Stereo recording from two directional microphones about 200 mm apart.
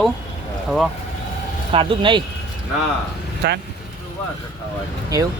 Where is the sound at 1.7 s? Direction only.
25° right (ahead or behind).